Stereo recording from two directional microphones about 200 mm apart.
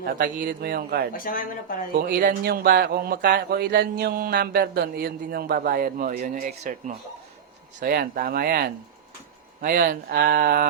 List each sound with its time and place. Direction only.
0.0 s speech: 45° right (ahead or behind)
1.1 s speech: 45° left (ahead or behind)
2.0 s speech: 45° right (ahead or behind)